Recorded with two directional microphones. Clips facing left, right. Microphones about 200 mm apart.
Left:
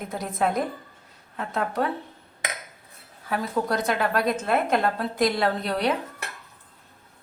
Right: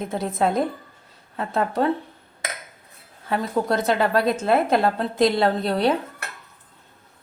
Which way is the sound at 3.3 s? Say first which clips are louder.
Right 3 dB; 25° right (ahead or behind).